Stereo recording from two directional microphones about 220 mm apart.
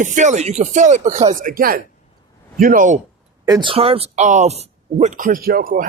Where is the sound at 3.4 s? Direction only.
20° right (ahead or behind).